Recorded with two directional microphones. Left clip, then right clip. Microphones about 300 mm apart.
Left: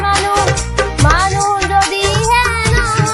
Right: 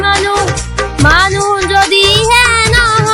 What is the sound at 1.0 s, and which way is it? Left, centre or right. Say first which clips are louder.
Music: right 6 dB; right.